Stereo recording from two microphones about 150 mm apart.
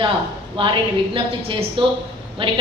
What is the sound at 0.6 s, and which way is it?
A woman's voice, 35° right (ahead or behind).